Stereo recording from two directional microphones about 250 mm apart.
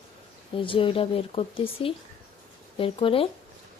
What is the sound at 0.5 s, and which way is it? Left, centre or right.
A woman's voice, left.